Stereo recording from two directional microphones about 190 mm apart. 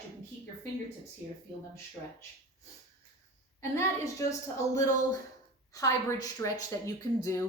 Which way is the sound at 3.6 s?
15° left (ahead or behind).